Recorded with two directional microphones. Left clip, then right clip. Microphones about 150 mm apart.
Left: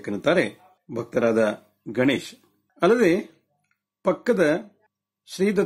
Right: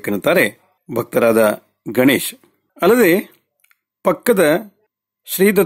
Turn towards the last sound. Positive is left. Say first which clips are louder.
# right 9 dB
turn(degrees=-45)  # may be behind; listen again after turning